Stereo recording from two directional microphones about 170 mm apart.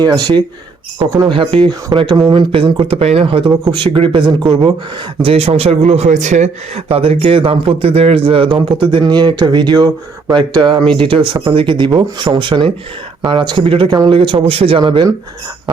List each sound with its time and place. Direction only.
0.0 s speech: 25° right (ahead or behind)